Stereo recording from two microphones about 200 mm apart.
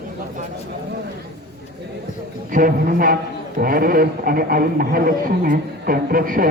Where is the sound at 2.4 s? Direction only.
45° right (ahead or behind).